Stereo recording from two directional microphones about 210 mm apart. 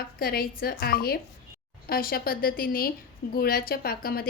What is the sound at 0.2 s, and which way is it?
A woman's voice, 45° left (ahead or behind).